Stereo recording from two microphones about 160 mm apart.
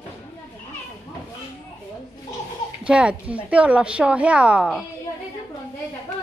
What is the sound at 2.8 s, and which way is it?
A woman's voice, 5° right (ahead or behind).